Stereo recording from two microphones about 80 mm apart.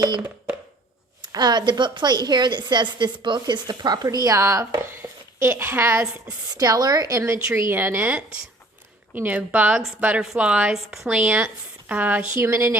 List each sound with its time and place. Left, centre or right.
1.3 s a woman's voice: right
5.0 s a sound: right
5.4 s a woman's voice: right
6.6 s a woman's voice: right
7.2 s a woman's voice: right; by 11.2 s centre
11.2 s speech: centre
12.4 s a woman's voice: right